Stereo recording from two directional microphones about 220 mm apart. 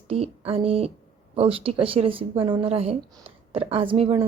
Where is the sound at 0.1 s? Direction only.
25° right (ahead or behind).